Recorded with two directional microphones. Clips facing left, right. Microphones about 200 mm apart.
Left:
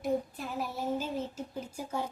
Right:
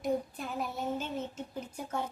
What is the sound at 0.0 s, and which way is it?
Child singing, 5° left (ahead or behind).